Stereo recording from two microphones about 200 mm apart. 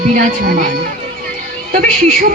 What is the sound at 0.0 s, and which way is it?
A man's voice, 40° right (ahead or behind).